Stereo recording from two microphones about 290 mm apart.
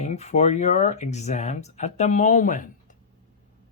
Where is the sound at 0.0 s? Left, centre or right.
Left.